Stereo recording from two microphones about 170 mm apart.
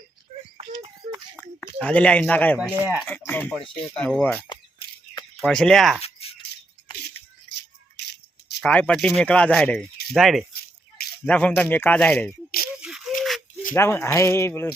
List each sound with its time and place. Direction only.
0.5 s music: 35° right (ahead or behind)
1.6 s speech: 5° left (ahead or behind)
2.8 s speech: 5° right (ahead or behind)
3.1 s speech: 10° left (ahead or behind)
8.6 s speech: 5° left (ahead or behind)
12.7 s a sound: 5° right (ahead or behind)
13.7 s speech: 15° left (ahead or behind)